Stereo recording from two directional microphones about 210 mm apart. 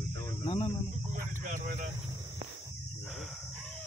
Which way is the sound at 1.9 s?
15° right (ahead or behind).